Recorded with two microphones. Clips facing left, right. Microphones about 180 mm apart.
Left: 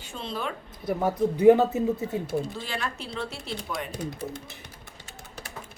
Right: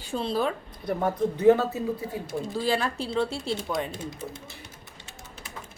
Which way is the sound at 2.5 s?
35° right (ahead or behind).